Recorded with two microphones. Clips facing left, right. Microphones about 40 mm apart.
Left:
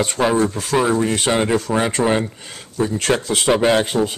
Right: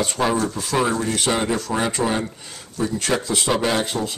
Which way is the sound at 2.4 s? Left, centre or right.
Left.